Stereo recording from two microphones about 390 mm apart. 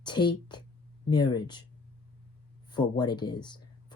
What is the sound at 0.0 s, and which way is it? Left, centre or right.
A woman's voice, centre.